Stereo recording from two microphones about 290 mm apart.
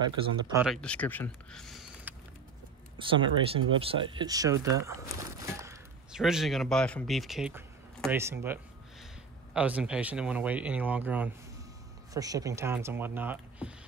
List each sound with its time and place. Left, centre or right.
0.0 s speech: centre
0.7 s speech: centre
3.0 s speech: centre
5.6 s speech: centre